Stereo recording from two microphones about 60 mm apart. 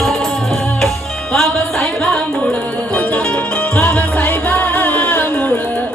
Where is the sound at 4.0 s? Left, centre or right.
Left.